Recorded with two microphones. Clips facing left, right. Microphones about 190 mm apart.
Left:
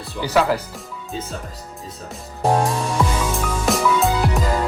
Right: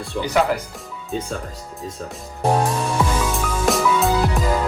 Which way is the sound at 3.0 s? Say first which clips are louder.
Left 1 dB; 5° right (ahead or behind).